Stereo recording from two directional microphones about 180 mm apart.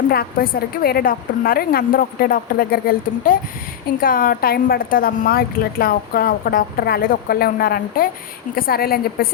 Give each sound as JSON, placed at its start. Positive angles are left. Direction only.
{"t": 0.1, "sound": "a woman's voice", "side_deg": 55}